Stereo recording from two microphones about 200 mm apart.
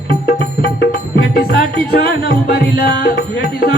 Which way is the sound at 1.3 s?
50° left (ahead or behind).